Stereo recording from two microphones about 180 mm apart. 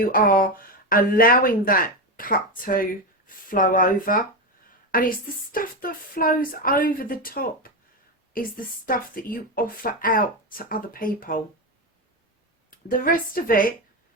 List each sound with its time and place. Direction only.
0.0 s speech: 55° left (ahead or behind)
12.7 s speech: 50° left (ahead or behind)